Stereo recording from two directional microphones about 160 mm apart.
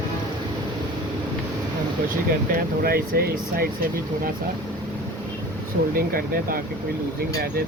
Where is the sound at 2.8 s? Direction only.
70° right (ahead or behind).